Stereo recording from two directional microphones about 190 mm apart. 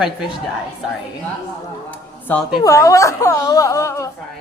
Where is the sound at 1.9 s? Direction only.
5° left (ahead or behind).